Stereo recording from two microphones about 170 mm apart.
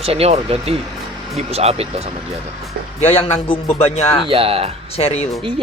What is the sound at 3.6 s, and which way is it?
Speech, 40° left (ahead or behind).